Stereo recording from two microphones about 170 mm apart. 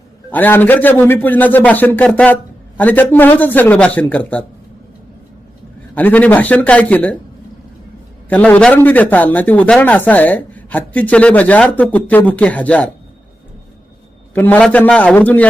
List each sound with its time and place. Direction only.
0.3 s a man's voice: 10° left (ahead or behind)
5.9 s a man's voice: 10° left (ahead or behind)
8.3 s a man's voice: 10° left (ahead or behind)
14.3 s a man's voice: 10° left (ahead or behind)